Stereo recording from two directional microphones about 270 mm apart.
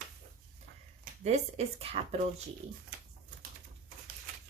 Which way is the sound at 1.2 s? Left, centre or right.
Right.